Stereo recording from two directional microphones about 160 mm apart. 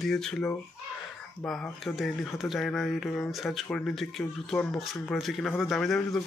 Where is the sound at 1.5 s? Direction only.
Centre (ahead or behind).